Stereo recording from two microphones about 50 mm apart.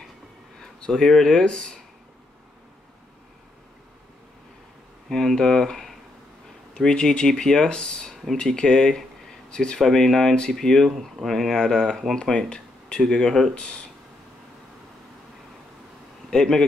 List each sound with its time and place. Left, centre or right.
0.6 s speech: centre
5.1 s speech: centre
9.8 s speech: centre; by 13.8 s left
16.3 s speech: centre